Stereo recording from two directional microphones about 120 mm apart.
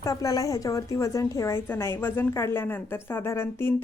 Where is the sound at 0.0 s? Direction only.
30° left (ahead or behind).